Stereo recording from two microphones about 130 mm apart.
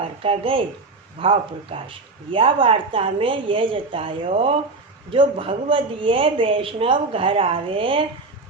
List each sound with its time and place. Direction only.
0.2 s a woman's voice: 45° right (ahead or behind)